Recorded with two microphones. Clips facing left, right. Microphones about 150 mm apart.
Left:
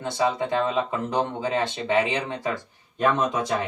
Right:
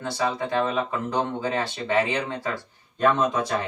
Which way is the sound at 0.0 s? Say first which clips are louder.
Left 2 dB; 20° left (ahead or behind).